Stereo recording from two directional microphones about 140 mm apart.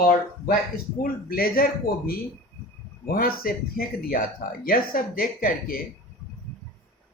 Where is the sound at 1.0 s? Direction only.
90° left.